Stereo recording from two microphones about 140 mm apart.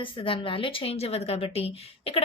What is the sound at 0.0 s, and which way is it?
A woman's voice, 35° left (ahead or behind).